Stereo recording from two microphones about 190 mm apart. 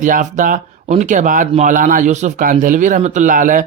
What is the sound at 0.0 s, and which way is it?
Speech, 40° right (ahead or behind).